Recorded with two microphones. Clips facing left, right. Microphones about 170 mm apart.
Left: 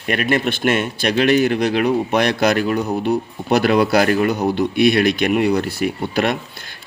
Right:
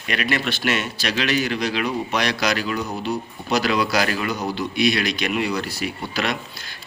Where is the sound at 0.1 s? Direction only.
50° left (ahead or behind).